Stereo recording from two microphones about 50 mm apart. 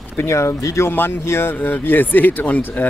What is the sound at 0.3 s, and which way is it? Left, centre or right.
Speech, left.